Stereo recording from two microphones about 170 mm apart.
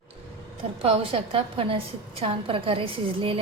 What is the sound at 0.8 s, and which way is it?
A woman's voice, 35° right (ahead or behind).